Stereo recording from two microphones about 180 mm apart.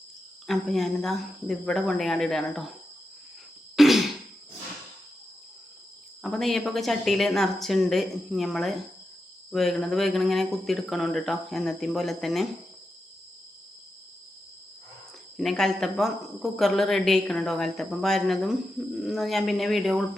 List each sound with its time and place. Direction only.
0.4 s speech: centre (ahead or behind)
3.8 s throat clearing: centre (ahead or behind)
6.2 s speech: centre (ahead or behind)
15.4 s speech: centre (ahead or behind)